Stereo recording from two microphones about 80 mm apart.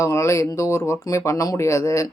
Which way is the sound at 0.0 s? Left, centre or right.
Left.